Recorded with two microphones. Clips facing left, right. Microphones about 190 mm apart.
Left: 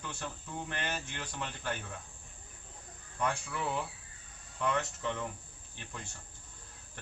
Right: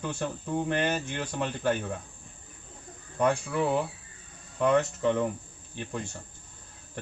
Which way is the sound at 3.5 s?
55° right (ahead or behind).